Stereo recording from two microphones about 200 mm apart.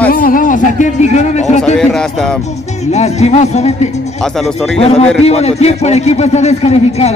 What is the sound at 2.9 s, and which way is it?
A man's voice, 35° left (ahead or behind).